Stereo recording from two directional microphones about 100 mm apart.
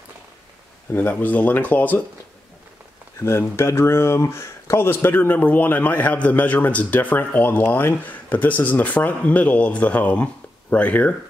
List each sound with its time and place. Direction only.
0.9 s speech: 20° left (ahead or behind)
3.2 s speech: 25° left (ahead or behind)